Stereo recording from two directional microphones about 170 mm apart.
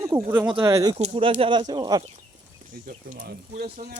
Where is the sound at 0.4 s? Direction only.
30° right (ahead or behind).